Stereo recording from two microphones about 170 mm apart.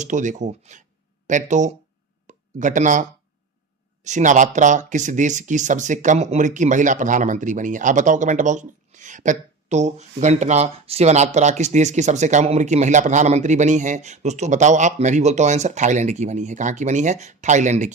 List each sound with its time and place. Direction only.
0.0 s speech: 45° right (ahead or behind)